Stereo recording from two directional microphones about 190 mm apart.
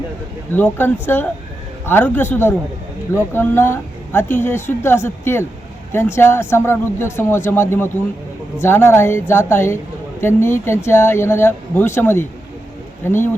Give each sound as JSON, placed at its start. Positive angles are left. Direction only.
{"t": 0.5, "sound": "a woman's voice", "side_deg": 10}